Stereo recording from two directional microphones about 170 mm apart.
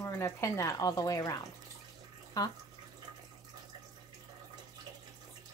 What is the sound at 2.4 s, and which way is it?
Speech, 20° left (ahead or behind).